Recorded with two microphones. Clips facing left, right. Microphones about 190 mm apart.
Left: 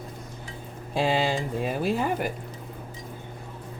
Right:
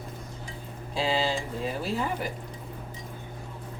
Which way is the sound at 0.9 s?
55° left (ahead or behind).